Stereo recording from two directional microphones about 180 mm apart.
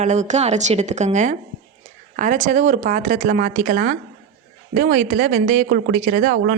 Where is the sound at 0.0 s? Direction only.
40° right (ahead or behind).